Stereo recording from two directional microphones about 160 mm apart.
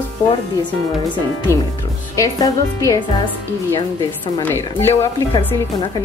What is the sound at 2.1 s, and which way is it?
Speech, 20° left (ahead or behind).